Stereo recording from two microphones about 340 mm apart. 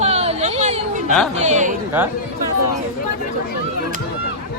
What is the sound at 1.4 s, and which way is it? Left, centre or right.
Speech, right.